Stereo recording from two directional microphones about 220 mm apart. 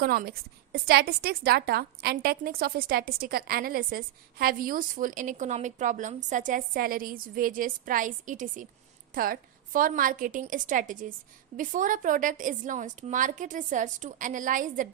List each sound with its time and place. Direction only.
0.0 s a woman's voice: 40° right (ahead or behind)